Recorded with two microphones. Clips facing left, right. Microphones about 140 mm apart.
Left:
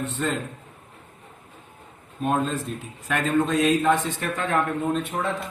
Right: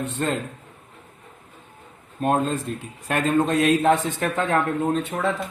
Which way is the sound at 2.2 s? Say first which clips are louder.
Right 2 dB; 45° right (ahead or behind).